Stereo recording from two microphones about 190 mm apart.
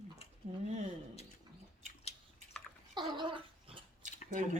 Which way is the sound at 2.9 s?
25° right (ahead or behind).